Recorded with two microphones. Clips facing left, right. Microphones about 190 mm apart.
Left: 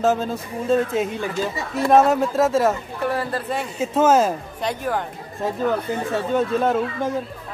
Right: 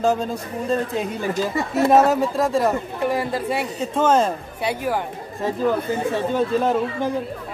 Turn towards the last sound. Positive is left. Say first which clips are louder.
# even
turn(degrees=0)  # may be behind; listen again after turning